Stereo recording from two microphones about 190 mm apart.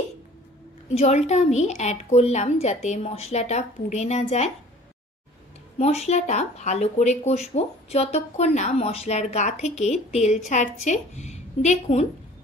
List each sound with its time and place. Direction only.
0.9 s speech: 35° left (ahead or behind)
5.8 s speech: 35° left (ahead or behind)